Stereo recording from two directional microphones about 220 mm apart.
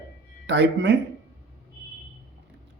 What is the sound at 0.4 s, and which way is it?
Speech, 55° right (ahead or behind).